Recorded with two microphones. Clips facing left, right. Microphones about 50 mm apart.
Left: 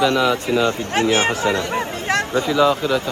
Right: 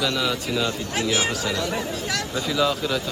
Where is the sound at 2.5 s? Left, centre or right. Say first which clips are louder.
Left 5 dB; centre.